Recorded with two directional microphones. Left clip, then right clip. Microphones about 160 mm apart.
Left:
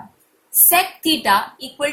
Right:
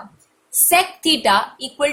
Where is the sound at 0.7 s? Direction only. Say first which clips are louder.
Right 2 dB; 25° right (ahead or behind).